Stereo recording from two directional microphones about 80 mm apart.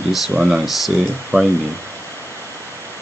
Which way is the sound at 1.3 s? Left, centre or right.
Right.